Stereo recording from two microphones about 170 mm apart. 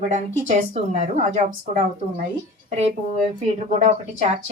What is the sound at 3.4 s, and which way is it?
Speech, 40° right (ahead or behind).